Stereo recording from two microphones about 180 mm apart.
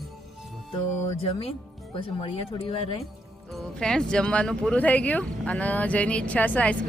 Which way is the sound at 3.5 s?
5° left (ahead or behind).